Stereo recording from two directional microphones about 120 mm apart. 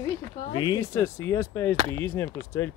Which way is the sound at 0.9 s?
20° left (ahead or behind).